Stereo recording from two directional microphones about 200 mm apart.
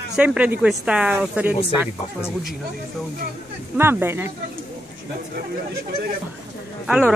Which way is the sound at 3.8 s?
10° right (ahead or behind).